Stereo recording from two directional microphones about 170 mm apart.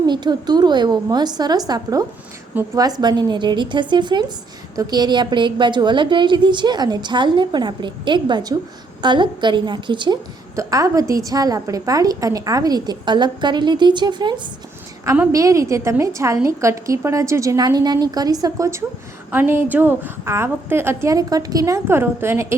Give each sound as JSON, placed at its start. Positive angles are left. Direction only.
{"t": 0.0, "sound": "a woman's voice", "side_deg": -25}
{"t": 15.0, "sound": "a woman's voice", "side_deg": -15}